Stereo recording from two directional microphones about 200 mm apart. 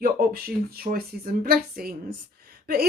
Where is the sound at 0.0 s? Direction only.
45° right (ahead or behind).